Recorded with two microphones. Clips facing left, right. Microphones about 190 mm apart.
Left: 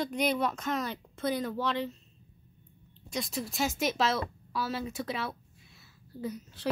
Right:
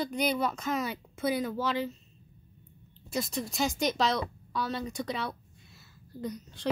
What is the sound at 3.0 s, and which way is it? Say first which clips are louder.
A woman's voice: right 2 dB; centre (ahead or behind).